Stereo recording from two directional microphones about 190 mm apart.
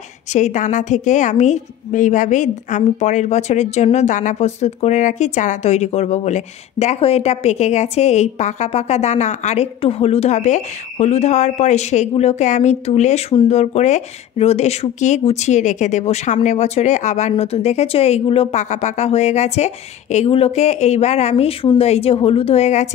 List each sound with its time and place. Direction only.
0.3 s a woman's voice: 40° left (ahead or behind)